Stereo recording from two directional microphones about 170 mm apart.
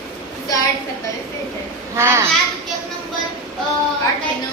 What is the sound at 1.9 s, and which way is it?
Speech, 15° right (ahead or behind).